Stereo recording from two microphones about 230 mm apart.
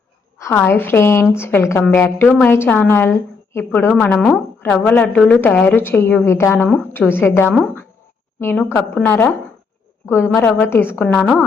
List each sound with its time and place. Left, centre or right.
0.3 s a woman's voice: centre